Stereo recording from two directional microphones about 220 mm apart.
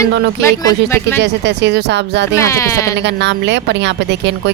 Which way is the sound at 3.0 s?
55° right (ahead or behind).